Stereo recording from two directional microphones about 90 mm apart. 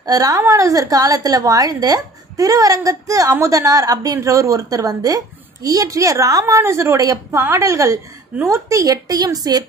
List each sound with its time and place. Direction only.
0.0 s a woman's voice: 45° right (ahead or behind)